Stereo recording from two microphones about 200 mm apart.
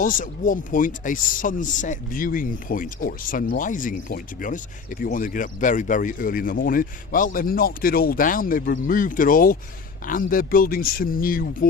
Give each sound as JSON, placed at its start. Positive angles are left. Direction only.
{"t": 0.0, "sound": "speech", "side_deg": 45}